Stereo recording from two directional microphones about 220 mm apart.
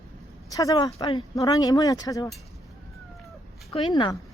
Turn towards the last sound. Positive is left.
turn(degrees=20)  # may be behind; listen again after turning